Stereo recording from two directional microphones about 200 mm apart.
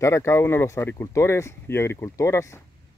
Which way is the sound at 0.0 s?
15° left (ahead or behind).